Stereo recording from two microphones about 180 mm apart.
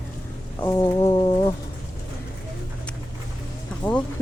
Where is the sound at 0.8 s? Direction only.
25° left (ahead or behind).